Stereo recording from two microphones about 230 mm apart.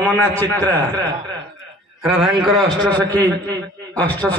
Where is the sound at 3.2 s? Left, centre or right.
Centre.